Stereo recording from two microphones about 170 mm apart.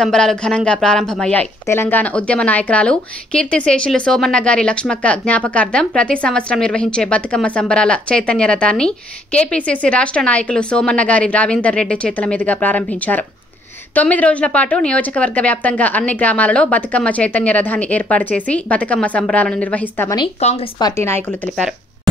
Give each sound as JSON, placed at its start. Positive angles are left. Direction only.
{"t": 0.0, "sound": "speech", "side_deg": 5}
{"t": 20.4, "sound": "speech", "side_deg": 40}
{"t": 20.8, "sound": "speech", "side_deg": 15}